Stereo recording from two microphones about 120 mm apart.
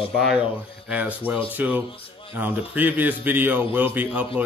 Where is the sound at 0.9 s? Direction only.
10° right (ahead or behind).